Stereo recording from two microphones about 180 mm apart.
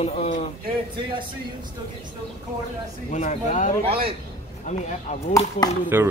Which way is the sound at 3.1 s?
40° left (ahead or behind).